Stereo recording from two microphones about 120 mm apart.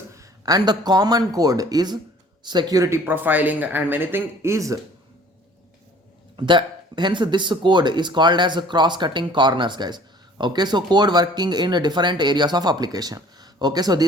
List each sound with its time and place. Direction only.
0.2 s speech: 30° right (ahead or behind)
6.3 s speech: 40° right (ahead or behind)